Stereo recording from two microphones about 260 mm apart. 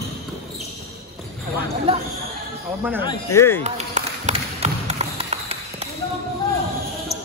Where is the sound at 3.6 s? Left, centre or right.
Right.